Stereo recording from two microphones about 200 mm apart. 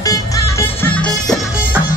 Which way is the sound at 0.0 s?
15° left (ahead or behind).